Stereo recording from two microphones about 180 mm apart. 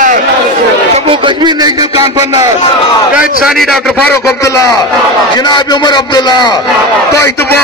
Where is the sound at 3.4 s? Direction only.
Centre (ahead or behind).